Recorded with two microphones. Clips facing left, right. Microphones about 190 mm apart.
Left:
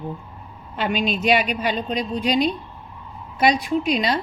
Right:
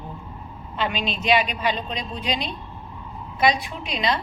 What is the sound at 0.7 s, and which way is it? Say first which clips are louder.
A woman's voice: left 4 dB; 45° left (ahead or behind).